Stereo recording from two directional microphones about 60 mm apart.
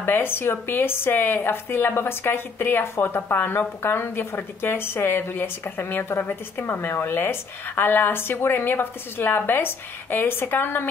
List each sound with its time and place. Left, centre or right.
0.0 s speech: left